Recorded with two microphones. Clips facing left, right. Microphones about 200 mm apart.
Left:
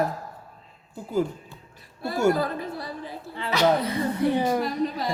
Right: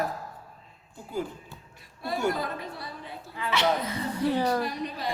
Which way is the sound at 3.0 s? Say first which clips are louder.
Left 3 dB; 30° left (ahead or behind).